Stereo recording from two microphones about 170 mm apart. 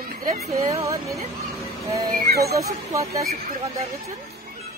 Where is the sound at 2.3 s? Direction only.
65° right (ahead or behind).